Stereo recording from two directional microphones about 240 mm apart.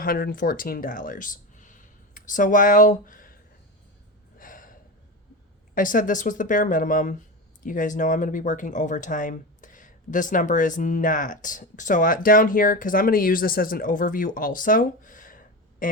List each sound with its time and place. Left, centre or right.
0.0 s speech: left
4.4 s gasp: left
5.7 s speech: left